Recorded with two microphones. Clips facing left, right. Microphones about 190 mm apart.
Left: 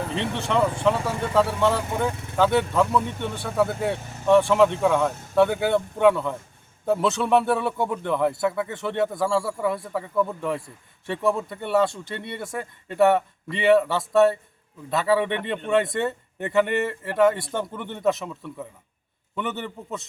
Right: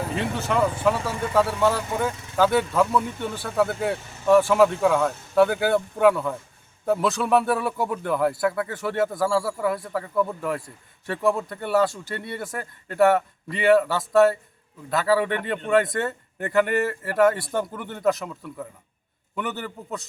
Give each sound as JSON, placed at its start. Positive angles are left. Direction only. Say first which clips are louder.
{"t": 0.1, "sound": "speech", "louder": "left 1 dB", "side_deg": -5}
{"t": 16.6, "sound": "a sound", "louder": "right 1 dB", "side_deg": 25}
{"t": 17.1, "sound": "speech", "louder": "even", "side_deg": 0}